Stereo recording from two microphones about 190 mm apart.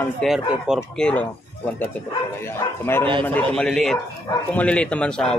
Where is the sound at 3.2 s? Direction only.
10° left (ahead or behind).